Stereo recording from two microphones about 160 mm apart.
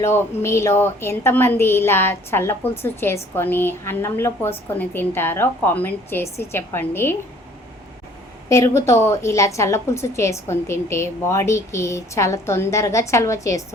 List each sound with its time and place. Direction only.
0.0 s a woman's voice: 15° left (ahead or behind)
8.4 s a woman's voice: 20° left (ahead or behind)